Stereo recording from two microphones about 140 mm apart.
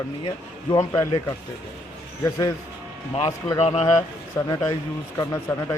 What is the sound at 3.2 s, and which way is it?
Speech, 35° left (ahead or behind).